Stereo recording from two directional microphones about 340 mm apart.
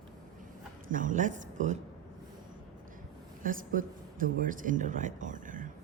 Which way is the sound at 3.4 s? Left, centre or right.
Right.